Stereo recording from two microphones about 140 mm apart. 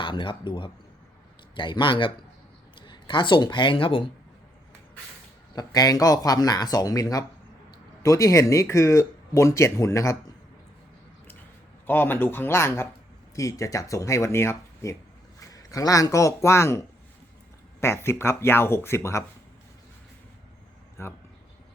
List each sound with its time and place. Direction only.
0.0 s a man's voice: 35° left (ahead or behind)
5.5 s speech: 25° left (ahead or behind)
11.9 s speech: 15° left (ahead or behind)
21.0 s speech: 15° left (ahead or behind)